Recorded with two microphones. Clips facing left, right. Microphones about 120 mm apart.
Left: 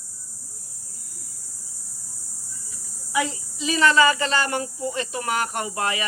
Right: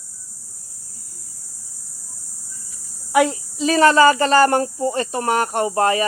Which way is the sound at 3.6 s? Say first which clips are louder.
Right 5 dB; 45° right (ahead or behind).